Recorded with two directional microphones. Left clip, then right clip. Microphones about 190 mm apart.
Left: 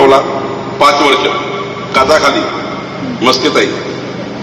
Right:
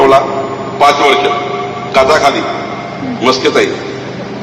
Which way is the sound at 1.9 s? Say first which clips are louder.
Even; 20° right (ahead or behind).